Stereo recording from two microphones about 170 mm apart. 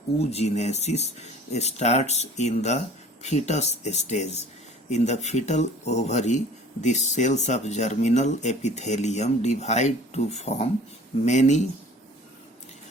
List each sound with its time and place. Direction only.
0.3 s speech: 40° left (ahead or behind)